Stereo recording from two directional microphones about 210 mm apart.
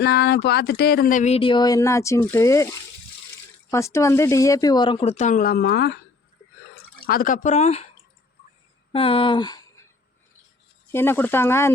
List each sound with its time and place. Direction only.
0.0 s speech: 50° left (ahead or behind); by 2.6 s 15° left (ahead or behind)
3.7 s speech: 15° left (ahead or behind); by 6.0 s 50° left (ahead or behind)
7.0 s speech: 45° left (ahead or behind)
8.9 s speech: 25° left (ahead or behind)
10.9 s speech: 10° left (ahead or behind)